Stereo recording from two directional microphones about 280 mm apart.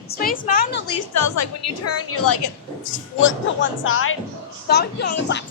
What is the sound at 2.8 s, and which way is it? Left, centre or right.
A woman's voice, left.